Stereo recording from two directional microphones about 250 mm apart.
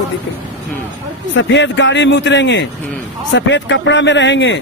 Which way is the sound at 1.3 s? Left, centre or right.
Left.